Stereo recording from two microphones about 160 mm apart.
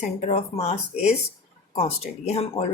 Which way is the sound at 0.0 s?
45° left (ahead or behind).